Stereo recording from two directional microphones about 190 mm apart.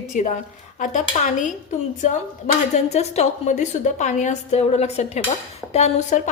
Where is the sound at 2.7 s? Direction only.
35° left (ahead or behind).